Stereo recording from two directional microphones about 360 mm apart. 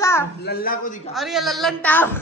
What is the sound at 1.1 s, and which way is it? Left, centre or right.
A woman's voice, centre.